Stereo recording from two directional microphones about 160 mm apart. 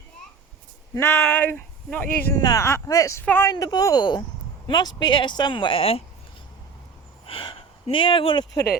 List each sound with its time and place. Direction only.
0.9 s speech: 15° left (ahead or behind)
3.5 s speech: 25° left (ahead or behind)
7.3 s a sound: 35° left (ahead or behind)